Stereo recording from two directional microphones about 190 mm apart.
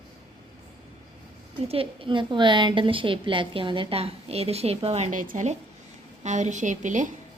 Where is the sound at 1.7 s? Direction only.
30° right (ahead or behind).